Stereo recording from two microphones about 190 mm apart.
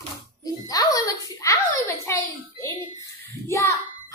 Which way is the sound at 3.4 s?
15° left (ahead or behind).